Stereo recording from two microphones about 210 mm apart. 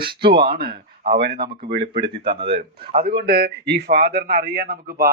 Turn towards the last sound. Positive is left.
turn(degrees=-45)  # may be behind; listen again after turning